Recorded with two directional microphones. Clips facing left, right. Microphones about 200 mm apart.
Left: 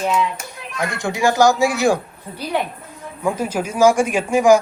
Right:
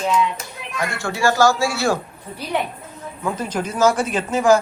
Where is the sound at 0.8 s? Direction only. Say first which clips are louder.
Left 2 dB; 15° left (ahead or behind).